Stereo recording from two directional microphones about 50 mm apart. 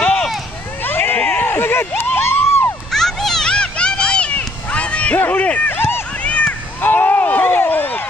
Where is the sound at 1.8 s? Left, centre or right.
Left.